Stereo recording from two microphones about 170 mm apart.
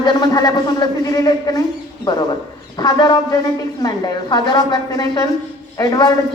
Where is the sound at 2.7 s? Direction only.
25° left (ahead or behind).